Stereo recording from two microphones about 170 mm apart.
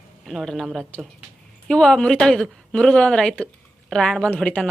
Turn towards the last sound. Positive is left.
turn(degrees=10)  # may be behind; listen again after turning